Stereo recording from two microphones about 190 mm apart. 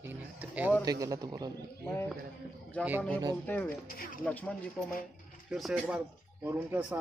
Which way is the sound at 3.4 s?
10° left (ahead or behind).